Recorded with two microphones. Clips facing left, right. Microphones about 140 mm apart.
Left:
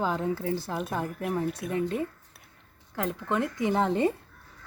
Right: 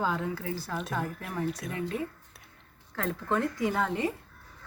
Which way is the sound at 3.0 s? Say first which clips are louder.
Left 1 dB; 15° left (ahead or behind).